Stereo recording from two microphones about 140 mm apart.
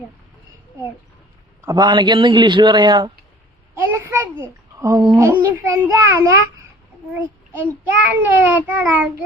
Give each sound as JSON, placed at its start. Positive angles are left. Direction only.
{"t": 1.6, "sound": "a man's voice", "side_deg": -30}
{"t": 3.8, "sound": "babbling", "side_deg": -15}
{"t": 5.1, "sound": "a child's voice", "side_deg": -15}